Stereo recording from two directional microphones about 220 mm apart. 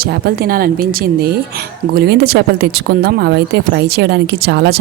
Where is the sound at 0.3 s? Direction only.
40° right (ahead or behind).